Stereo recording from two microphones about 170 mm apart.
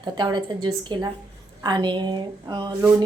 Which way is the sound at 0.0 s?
25° right (ahead or behind).